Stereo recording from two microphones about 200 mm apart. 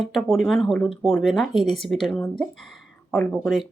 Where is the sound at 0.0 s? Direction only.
Centre (ahead or behind).